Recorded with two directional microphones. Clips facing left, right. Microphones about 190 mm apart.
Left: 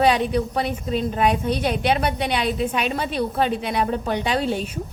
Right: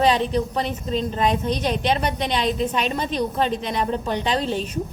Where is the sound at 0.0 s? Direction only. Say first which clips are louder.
Left 1 dB; 10° left (ahead or behind).